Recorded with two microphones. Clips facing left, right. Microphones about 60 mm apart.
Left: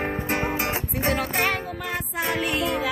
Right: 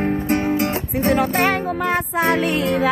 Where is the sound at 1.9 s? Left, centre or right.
Right.